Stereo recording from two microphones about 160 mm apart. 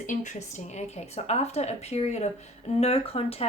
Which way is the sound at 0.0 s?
50° left (ahead or behind).